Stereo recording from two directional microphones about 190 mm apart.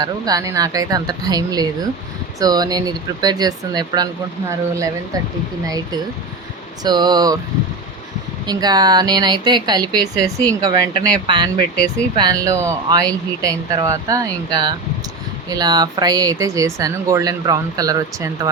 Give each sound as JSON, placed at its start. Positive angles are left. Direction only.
{"t": 0.0, "sound": "speech", "side_deg": -20}
{"t": 8.4, "sound": "speech", "side_deg": -20}